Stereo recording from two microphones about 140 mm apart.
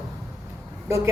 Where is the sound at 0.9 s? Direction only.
20° right (ahead or behind).